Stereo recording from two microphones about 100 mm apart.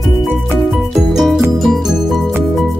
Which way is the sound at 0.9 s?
5° right (ahead or behind).